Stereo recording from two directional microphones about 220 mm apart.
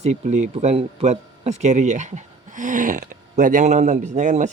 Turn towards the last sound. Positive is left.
turn(degrees=-35)  # may be behind; listen again after turning